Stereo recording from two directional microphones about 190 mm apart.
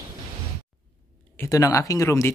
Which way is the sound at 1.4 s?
15° left (ahead or behind).